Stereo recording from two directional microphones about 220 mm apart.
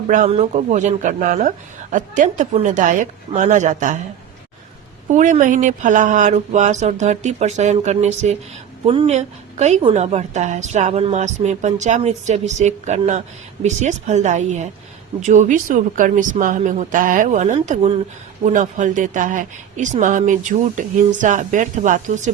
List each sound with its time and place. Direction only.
0.1 s a woman's voice: 30° right (ahead or behind)
5.1 s a woman's voice: 35° right (ahead or behind)